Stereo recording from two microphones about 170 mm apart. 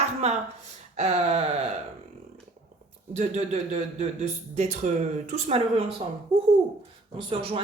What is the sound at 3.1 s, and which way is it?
Speech, 40° right (ahead or behind).